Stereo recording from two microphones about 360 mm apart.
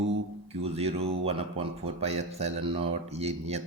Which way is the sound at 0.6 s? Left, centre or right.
Centre.